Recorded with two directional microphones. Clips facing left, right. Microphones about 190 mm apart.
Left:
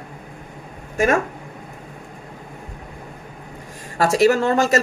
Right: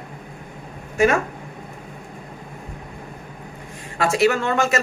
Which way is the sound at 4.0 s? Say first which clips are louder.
Left 3 dB; 40° left (ahead or behind).